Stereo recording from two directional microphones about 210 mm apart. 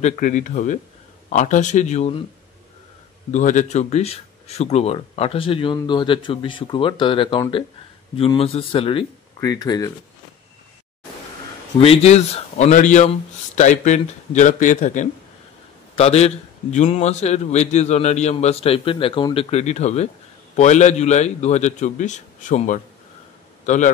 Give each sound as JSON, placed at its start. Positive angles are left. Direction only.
{"t": 0.0, "sound": "a man's voice", "side_deg": 35}
{"t": 3.3, "sound": "speech", "side_deg": 35}
{"t": 11.8, "sound": "a man's voice", "side_deg": 30}